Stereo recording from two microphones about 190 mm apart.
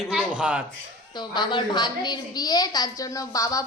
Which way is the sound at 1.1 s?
25° left (ahead or behind).